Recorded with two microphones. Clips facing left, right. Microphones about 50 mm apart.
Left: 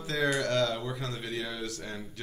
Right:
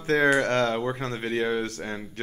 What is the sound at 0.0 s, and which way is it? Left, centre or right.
Speech, right.